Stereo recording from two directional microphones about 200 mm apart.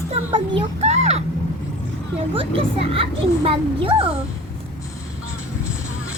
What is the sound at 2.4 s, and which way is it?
A child's voice, 25° right (ahead or behind).